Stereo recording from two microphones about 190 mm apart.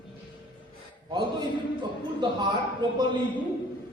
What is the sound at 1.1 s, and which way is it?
A man's voice, 25° right (ahead or behind).